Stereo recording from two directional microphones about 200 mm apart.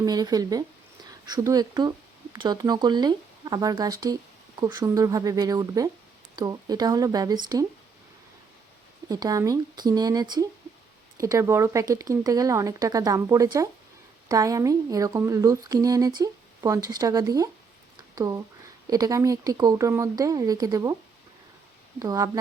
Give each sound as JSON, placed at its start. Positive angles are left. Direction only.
{"t": 0.0, "sound": "speech", "side_deg": -20}
{"t": 9.0, "sound": "speech", "side_deg": -20}
{"t": 17.9, "sound": "a sound", "side_deg": -20}
{"t": 18.9, "sound": "speech", "side_deg": -20}
{"t": 21.9, "sound": "speech", "side_deg": -15}